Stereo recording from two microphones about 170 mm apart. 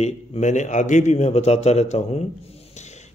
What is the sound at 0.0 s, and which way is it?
A man's voice, 40° left (ahead or behind).